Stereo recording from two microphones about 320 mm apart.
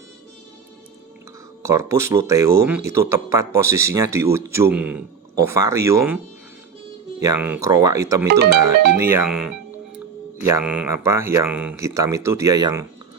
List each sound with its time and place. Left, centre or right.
1.6 s speech: centre
7.2 s speech: centre
8.3 s speech: right
9.0 s speech: centre